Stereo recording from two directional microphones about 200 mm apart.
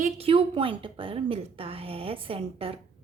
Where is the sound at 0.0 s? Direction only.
30° right (ahead or behind).